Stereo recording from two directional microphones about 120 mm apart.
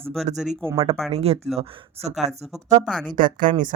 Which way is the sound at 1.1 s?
60° right (ahead or behind).